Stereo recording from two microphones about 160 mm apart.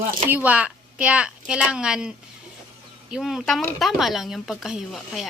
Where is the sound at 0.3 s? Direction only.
10° right (ahead or behind).